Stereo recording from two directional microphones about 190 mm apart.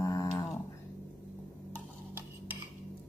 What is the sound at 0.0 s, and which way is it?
Dog, 15° left (ahead or behind).